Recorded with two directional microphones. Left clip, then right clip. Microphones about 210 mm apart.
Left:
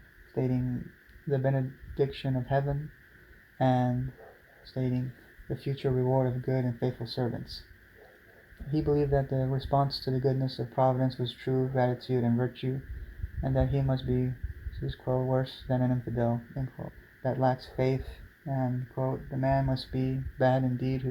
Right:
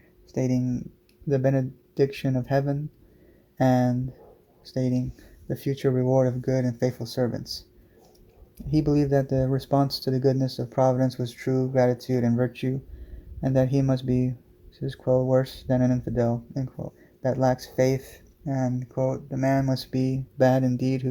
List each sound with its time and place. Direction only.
0.3 s speech: 55° right (ahead or behind)
8.8 s speech: 55° right (ahead or behind)